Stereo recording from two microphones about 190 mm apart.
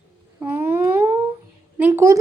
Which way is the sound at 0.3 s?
10° right (ahead or behind).